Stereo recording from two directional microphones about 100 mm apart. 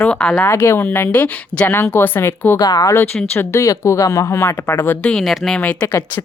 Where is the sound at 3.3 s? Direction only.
30° left (ahead or behind).